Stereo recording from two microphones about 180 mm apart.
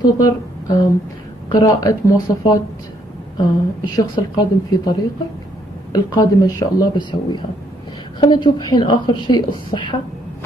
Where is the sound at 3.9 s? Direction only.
20° left (ahead or behind).